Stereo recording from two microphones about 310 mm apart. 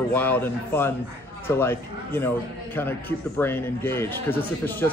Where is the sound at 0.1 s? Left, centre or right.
Centre.